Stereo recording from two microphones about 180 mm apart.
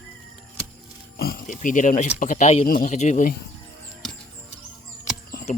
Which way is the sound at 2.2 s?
45° left (ahead or behind).